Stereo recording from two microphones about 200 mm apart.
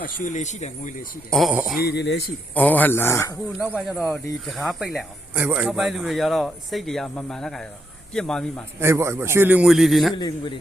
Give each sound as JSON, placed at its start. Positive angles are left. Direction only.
{"t": 0.0, "sound": "speech", "side_deg": 40}
{"t": 1.3, "sound": "speech", "side_deg": 0}
{"t": 1.8, "sound": "speech", "side_deg": 55}
{"t": 2.6, "sound": "speech", "side_deg": 10}
{"t": 3.7, "sound": "speech", "side_deg": -5}
{"t": 8.8, "sound": "a man's voice", "side_deg": -15}
{"t": 10.2, "sound": "a man's voice", "side_deg": 20}